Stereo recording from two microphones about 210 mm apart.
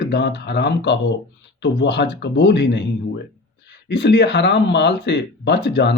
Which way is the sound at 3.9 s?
55° left (ahead or behind).